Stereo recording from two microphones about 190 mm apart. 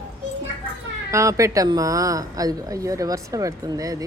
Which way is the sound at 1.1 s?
15° right (ahead or behind).